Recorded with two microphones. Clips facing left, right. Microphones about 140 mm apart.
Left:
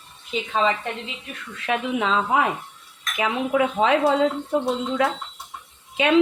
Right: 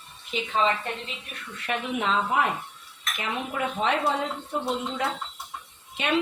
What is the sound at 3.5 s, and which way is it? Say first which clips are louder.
Speech: left 7 dB; 90° left.